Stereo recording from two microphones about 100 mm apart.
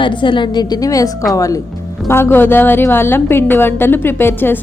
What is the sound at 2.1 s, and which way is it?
Speech, 25° left (ahead or behind).